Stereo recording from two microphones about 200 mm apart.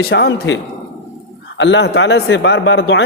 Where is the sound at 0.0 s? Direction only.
55° left (ahead or behind).